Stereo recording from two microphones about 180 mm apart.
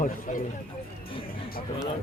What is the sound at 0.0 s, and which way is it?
Speech, 45° left (ahead or behind).